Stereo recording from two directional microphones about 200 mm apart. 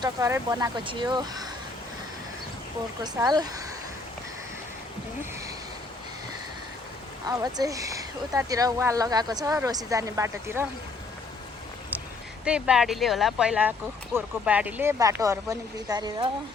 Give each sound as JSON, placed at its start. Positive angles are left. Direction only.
{"t": 0.0, "sound": "speech", "side_deg": -15}
{"t": 3.0, "sound": "speech", "side_deg": -20}
{"t": 7.3, "sound": "speech", "side_deg": -20}
{"t": 12.5, "sound": "speech", "side_deg": -5}